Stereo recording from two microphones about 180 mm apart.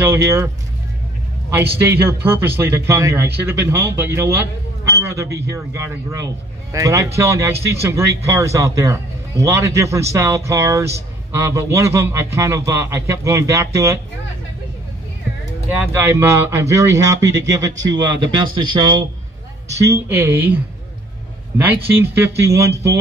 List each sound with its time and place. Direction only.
0.0 s a man's voice: 15° right (ahead or behind)
1.5 s a man's voice: 15° right (ahead or behind)
15.9 s speech: 15° right (ahead or behind)
19.8 s a man's voice: 15° right (ahead or behind)